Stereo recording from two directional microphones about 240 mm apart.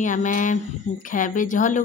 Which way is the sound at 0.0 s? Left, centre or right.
Left.